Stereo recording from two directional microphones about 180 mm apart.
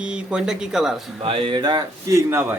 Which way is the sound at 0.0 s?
5° right (ahead or behind).